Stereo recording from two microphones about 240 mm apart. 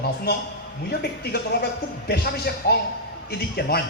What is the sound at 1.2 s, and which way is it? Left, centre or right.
A man's voice, left.